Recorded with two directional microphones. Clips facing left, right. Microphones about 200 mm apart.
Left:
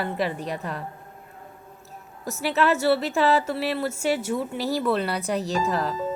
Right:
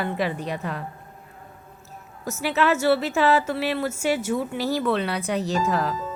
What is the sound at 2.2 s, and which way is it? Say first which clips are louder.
A woman's voice: even; centre (ahead or behind).